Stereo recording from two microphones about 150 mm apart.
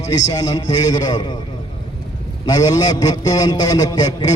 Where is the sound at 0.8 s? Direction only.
25° left (ahead or behind).